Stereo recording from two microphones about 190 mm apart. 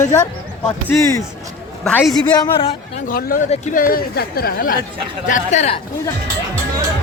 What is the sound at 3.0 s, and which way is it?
Speech, 50° left (ahead or behind).